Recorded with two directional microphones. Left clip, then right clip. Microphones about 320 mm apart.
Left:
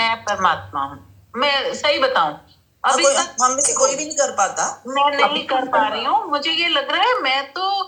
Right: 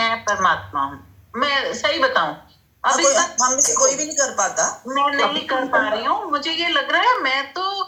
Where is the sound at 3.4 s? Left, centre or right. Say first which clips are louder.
Left 2 dB; left.